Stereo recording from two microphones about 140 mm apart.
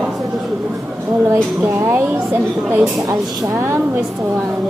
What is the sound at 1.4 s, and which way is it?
A woman's voice, 10° right (ahead or behind).